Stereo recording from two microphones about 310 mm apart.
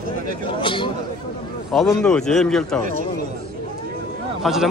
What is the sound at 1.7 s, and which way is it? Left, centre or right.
A man's voice, centre.